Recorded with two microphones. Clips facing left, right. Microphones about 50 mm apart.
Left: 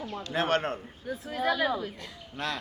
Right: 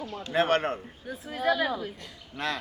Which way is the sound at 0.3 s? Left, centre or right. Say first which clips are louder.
Right 3 dB; right.